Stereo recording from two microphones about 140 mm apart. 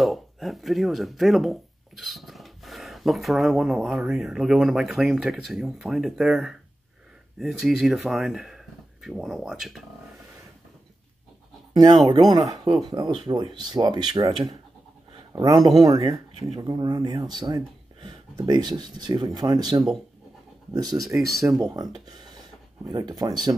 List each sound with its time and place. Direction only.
0.0 s speech: centre (ahead or behind)
11.7 s speech: 25° right (ahead or behind)
21.4 s speech: 15° right (ahead or behind)
21.9 s speech: 30° right (ahead or behind)